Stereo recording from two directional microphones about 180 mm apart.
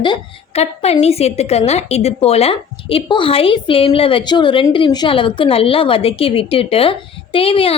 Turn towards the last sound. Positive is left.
turn(degrees=30)  # may be behind; listen again after turning